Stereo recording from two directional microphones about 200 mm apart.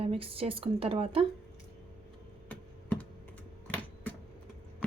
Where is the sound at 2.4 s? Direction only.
5° left (ahead or behind).